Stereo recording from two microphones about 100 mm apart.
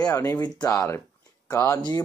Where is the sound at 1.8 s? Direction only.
45° left (ahead or behind).